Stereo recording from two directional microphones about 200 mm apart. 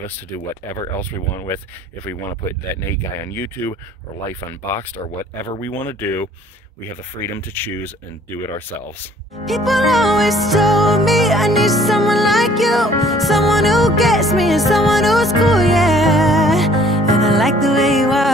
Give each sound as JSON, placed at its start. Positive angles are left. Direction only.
{"t": 2.9, "sound": "speech", "side_deg": 15}
{"t": 9.5, "sound": "music", "side_deg": 0}